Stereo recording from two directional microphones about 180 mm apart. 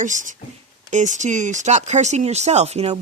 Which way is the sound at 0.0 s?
45° right (ahead or behind).